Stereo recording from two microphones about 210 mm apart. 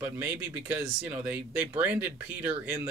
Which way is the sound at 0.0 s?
10° right (ahead or behind).